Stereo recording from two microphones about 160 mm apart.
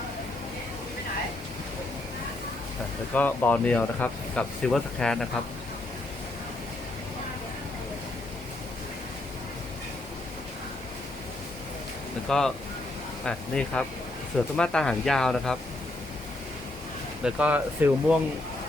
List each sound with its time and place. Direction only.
3.2 s speech: 10° left (ahead or behind)
12.3 s speech: 5° left (ahead or behind)
17.2 s speech: 10° right (ahead or behind)